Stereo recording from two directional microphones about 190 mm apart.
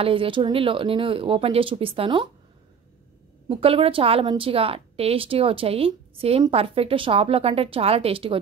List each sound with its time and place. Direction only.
0.0 s a woman's voice: 30° right (ahead or behind)
3.4 s a woman's voice: 30° right (ahead or behind)